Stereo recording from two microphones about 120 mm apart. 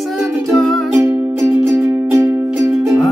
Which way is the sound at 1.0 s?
15° right (ahead or behind).